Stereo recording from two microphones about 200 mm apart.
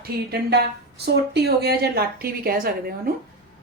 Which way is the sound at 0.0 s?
55° right (ahead or behind).